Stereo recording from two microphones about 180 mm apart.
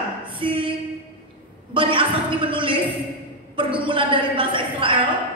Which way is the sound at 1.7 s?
30° right (ahead or behind).